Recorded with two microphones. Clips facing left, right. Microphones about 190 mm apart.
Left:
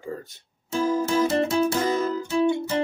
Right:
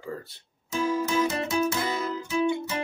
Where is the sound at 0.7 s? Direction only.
35° left (ahead or behind).